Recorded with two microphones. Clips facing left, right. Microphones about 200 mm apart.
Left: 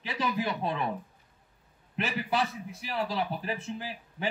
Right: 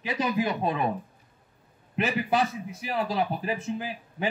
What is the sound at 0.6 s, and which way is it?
Speech, 50° right (ahead or behind).